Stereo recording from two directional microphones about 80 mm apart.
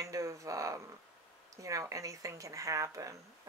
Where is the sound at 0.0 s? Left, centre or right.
Right.